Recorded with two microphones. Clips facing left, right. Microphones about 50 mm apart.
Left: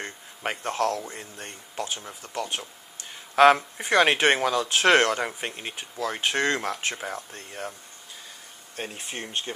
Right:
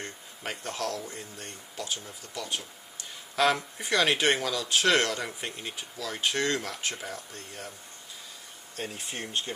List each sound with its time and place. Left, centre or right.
0.0 s speech: left
8.7 s speech: left